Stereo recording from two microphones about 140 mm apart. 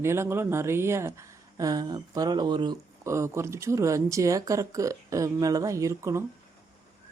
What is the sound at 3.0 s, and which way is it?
Speech, 20° right (ahead or behind).